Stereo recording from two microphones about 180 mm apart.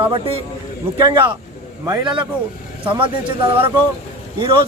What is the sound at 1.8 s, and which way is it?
Speech, 25° right (ahead or behind).